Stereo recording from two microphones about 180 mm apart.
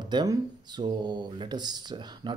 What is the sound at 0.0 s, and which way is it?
Speech, 25° right (ahead or behind).